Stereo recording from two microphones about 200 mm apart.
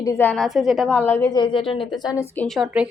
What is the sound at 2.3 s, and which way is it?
Speech, 5° left (ahead or behind).